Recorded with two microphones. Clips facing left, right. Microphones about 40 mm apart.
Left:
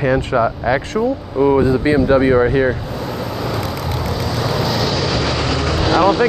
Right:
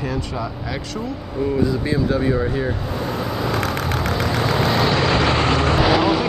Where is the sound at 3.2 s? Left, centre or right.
Centre.